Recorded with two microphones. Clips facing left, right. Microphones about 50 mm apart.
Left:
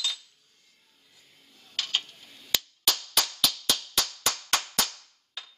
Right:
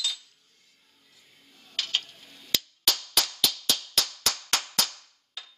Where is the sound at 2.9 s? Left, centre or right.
Centre.